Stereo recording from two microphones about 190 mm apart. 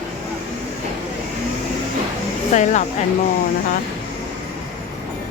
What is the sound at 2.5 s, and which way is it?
Speech, 40° left (ahead or behind).